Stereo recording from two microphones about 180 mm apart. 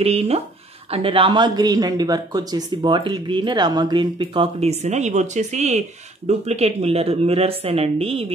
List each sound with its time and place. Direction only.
0.0 s speech: 35° right (ahead or behind)